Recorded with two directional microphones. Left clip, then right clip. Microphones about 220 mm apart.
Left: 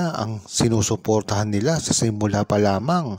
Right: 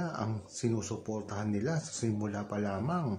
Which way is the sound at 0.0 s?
40° left (ahead or behind).